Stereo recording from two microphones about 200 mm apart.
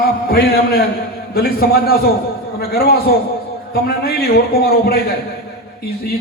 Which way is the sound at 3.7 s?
50° left (ahead or behind).